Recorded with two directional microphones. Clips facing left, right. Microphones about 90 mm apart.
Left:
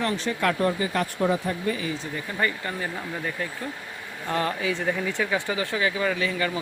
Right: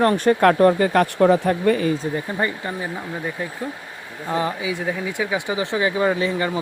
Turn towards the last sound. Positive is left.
turn(degrees=-25)  # may be behind; listen again after turning